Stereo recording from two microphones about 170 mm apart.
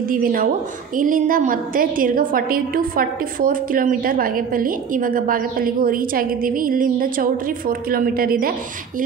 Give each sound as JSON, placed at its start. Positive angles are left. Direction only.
{"t": 0.1, "sound": "a woman's voice", "side_deg": -55}